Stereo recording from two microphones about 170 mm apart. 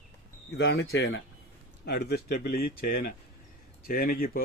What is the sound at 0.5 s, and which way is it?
Speech, 75° left (ahead or behind).